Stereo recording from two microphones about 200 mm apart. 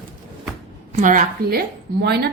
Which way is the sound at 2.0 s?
55° right (ahead or behind).